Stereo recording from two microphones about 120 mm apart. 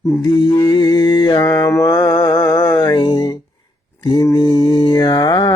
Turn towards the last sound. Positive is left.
turn(degrees=40)  # may be behind; listen again after turning